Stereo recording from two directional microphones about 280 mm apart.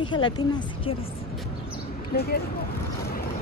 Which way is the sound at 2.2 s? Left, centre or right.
Left.